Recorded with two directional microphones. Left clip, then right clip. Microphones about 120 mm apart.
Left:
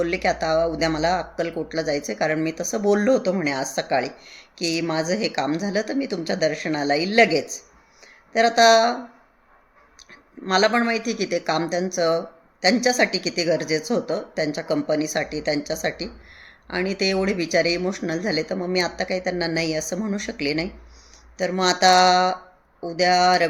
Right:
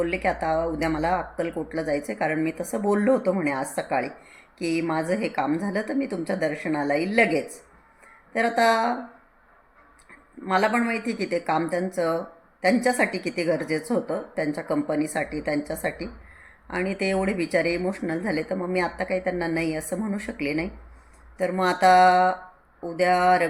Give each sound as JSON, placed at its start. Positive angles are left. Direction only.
{"t": 0.0, "sound": "speech", "side_deg": 30}
{"t": 10.4, "sound": "speech", "side_deg": 35}